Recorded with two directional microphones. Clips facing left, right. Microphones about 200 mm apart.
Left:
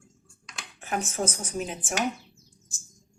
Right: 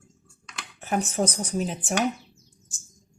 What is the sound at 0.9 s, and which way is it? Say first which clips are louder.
Speech: right 4 dB; 35° right (ahead or behind).